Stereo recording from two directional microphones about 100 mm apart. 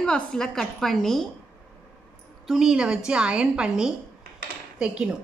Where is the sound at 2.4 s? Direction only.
5° right (ahead or behind).